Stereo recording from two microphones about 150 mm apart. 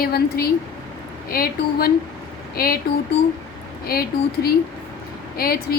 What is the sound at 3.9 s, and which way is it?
A woman's voice, 85° left.